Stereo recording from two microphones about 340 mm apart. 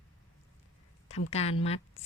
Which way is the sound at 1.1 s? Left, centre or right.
Centre.